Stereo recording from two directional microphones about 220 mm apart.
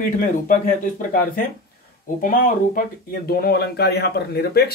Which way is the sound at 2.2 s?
40° left (ahead or behind).